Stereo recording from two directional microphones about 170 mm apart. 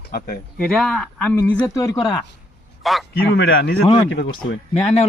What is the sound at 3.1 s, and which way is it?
A man's voice, 90° left.